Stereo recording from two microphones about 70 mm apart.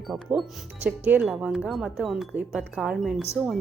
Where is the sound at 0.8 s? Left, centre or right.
Right.